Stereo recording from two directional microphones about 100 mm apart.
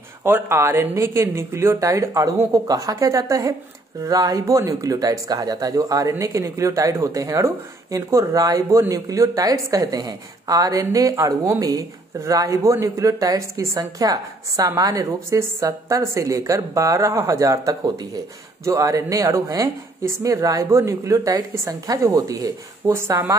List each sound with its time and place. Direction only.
0.2 s speech: 25° right (ahead or behind)